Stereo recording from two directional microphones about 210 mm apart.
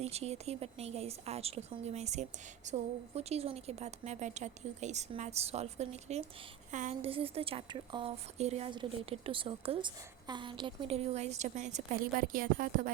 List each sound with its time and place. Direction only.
0.0 s a woman's voice: 30° right (ahead or behind)